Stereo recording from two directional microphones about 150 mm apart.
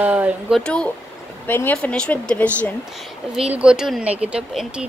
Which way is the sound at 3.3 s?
5° right (ahead or behind).